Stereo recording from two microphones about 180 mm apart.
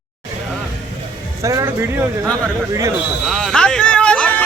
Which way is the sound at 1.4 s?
15° right (ahead or behind).